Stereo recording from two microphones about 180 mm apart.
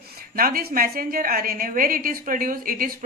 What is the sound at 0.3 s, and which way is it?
A woman's voice, 55° right (ahead or behind).